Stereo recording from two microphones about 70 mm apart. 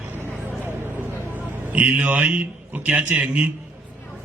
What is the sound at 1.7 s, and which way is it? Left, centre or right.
A man's voice, right.